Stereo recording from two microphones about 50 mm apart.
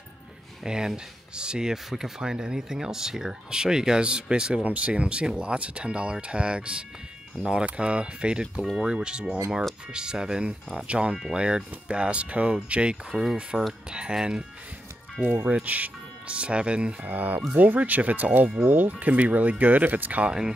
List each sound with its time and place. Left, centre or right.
0.7 s speech: centre
4.6 s speech: right
13.1 s speech: centre
13.9 s speech: centre
15.3 s speech: right
17.1 s speech: right